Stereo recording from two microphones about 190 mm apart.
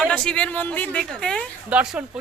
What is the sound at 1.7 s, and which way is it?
Speech, 5° right (ahead or behind).